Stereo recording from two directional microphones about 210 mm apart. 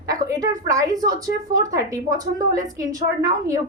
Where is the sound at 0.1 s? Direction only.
15° right (ahead or behind).